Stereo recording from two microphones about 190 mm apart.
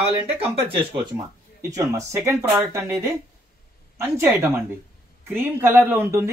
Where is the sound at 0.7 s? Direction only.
25° right (ahead or behind).